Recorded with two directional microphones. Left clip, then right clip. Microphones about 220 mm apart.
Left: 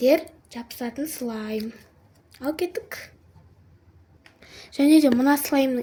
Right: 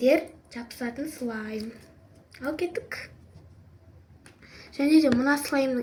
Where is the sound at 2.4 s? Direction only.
45° left (ahead or behind).